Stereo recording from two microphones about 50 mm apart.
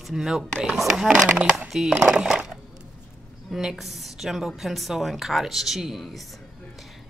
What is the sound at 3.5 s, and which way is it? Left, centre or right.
Speech, centre.